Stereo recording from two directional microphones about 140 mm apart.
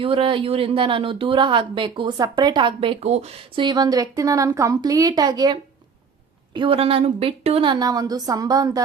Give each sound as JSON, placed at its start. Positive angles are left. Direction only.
{"t": 0.0, "sound": "speech", "side_deg": -40}
{"t": 3.6, "sound": "a woman's voice", "side_deg": -30}
{"t": 6.5, "sound": "speech", "side_deg": -40}